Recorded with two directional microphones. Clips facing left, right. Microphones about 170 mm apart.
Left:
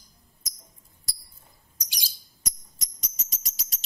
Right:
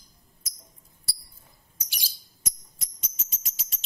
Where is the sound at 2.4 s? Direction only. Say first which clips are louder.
Left 1 dB; 40° left (ahead or behind).